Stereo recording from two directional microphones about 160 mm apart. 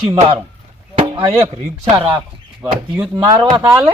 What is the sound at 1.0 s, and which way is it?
Chop, 30° right (ahead or behind).